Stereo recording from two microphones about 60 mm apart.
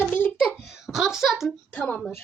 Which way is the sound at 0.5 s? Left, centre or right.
Centre.